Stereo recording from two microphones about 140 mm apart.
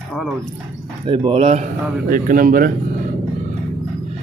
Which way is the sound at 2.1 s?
90° right.